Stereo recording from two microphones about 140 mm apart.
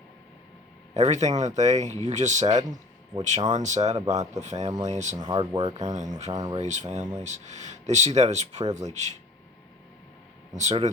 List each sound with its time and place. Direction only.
0.9 s speech: 55° right (ahead or behind)
5.1 s speech: 35° right (ahead or behind)
5.7 s speech: 55° right (ahead or behind)
6.3 s speech: 30° right (ahead or behind)
6.6 s speech: 55° right (ahead or behind)
10.5 s speech: 55° right (ahead or behind)